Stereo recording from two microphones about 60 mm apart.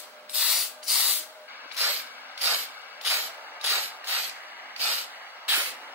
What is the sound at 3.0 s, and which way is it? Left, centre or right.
Vehicle, right.